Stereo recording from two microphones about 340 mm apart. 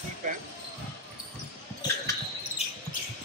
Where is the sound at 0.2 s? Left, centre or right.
Right.